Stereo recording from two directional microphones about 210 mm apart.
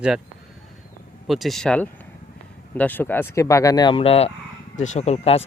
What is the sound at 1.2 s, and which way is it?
Speech, centre (ahead or behind).